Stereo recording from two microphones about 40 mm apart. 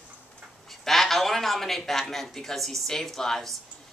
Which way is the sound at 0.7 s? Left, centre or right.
Centre.